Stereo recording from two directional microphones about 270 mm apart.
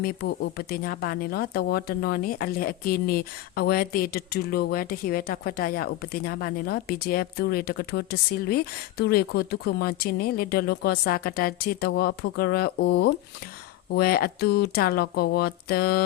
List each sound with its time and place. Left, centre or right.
0.0 s speech: left